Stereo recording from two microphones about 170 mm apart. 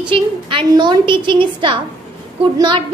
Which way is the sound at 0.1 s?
30° right (ahead or behind).